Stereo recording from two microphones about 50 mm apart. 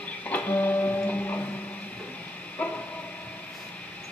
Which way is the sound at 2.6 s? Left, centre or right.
Left.